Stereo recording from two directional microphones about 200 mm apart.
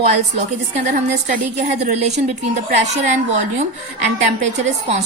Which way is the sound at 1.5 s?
35° right (ahead or behind).